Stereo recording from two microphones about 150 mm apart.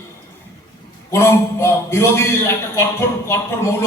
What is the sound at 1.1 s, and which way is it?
A man's voice, 20° left (ahead or behind).